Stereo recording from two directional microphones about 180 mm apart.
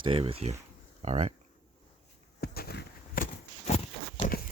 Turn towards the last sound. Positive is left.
turn(degrees=50)  # may be behind; listen again after turning